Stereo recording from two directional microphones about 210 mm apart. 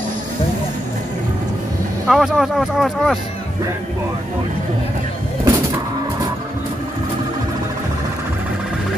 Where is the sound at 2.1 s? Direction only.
Centre (ahead or behind).